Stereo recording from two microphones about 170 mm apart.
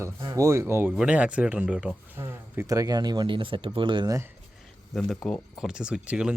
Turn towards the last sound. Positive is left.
turn(degrees=-5)  # may be behind; listen again after turning